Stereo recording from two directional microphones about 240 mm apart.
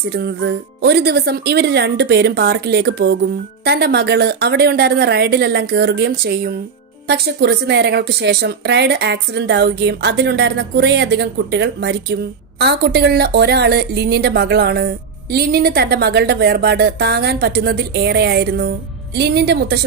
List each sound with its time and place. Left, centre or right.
0.0 s a woman's voice: right